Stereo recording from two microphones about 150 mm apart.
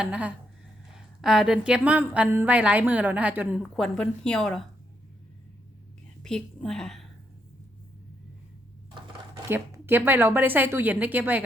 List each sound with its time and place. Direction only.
0.0 s a woman's voice: 10° right (ahead or behind)
3.8 s a woman's voice: 5° left (ahead or behind)
6.2 s a woman's voice: 5° left (ahead or behind)
9.5 s a woman's voice: 15° right (ahead or behind)